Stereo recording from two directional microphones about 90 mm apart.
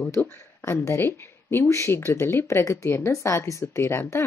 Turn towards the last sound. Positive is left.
turn(degrees=30)  # may be behind; listen again after turning